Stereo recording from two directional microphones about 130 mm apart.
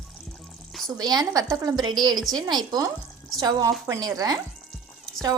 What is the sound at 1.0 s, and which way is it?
A woman's voice, 30° right (ahead or behind).